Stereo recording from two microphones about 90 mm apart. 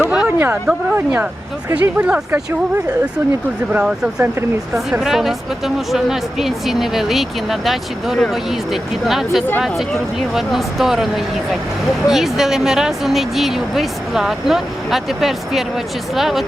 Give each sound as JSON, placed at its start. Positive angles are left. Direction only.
{"t": 0.0, "sound": "a sound", "side_deg": -10}
{"t": 0.3, "sound": "speech", "side_deg": -25}
{"t": 1.8, "sound": "speech", "side_deg": -15}
{"t": 3.7, "sound": "speech", "side_deg": -10}
{"t": 4.2, "sound": "speech", "side_deg": -30}
{"t": 4.9, "sound": "speech", "side_deg": -5}